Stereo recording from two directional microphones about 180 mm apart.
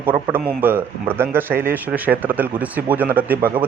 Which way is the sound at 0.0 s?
10° right (ahead or behind).